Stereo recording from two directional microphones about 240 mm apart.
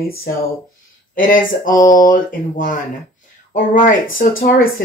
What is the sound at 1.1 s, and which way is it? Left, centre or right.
Speech, left.